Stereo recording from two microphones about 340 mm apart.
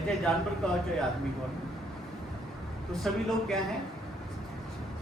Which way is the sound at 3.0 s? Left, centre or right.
Centre.